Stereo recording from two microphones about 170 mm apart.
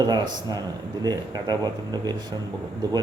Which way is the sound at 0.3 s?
25° right (ahead or behind).